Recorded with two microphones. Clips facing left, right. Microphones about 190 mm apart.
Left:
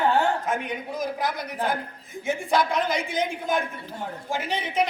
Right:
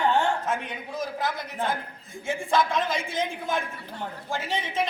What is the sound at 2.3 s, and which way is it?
A man's voice, 15° left (ahead or behind).